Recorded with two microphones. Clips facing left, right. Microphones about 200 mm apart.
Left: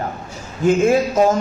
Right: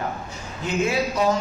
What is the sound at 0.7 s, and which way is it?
Speech, 50° left (ahead or behind).